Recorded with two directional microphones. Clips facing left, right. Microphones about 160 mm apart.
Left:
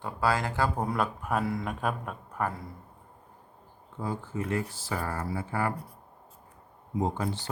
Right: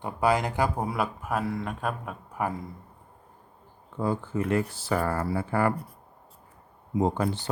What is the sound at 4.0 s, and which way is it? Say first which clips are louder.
Speech: right 5 dB; 65° right (ahead or behind).